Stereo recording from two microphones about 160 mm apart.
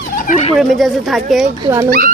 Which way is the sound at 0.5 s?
Centre (ahead or behind).